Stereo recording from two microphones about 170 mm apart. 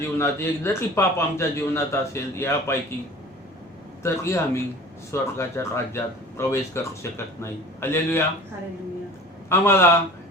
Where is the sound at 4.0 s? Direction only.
15° left (ahead or behind).